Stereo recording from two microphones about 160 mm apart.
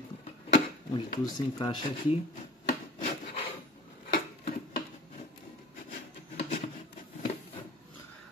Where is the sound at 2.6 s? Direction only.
55° left (ahead or behind).